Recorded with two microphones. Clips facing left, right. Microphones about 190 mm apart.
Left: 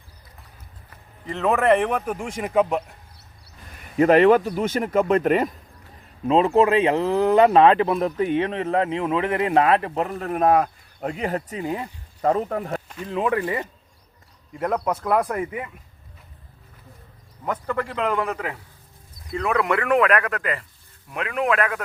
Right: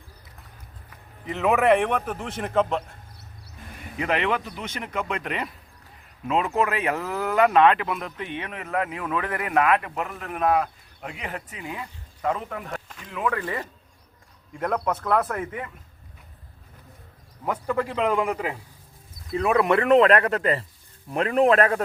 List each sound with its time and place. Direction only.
0.9 s speech: centre (ahead or behind)
3.9 s speech: 45° left (ahead or behind)
6.2 s speech: 30° left (ahead or behind)
13.1 s speech: 25° left (ahead or behind)
14.5 s speech: 5° left (ahead or behind)
17.4 s a man's voice: 10° right (ahead or behind); by 21.8 s 35° right (ahead or behind)